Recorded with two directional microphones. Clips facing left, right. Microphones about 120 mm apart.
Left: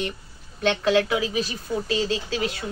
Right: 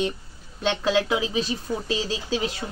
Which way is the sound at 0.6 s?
20° right (ahead or behind).